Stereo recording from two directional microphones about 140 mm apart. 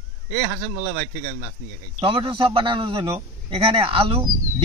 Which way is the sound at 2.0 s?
40° right (ahead or behind).